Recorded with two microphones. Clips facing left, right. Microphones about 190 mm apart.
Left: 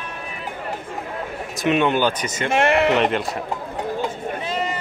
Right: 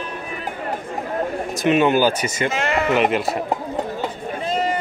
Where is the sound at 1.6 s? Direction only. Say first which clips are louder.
Right 2 dB; centre (ahead or behind).